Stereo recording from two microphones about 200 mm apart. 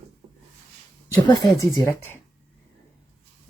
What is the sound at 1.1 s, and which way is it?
Speech, 20° left (ahead or behind).